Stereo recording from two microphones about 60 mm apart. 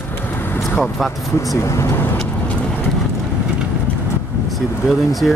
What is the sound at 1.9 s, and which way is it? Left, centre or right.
Vehicle, left.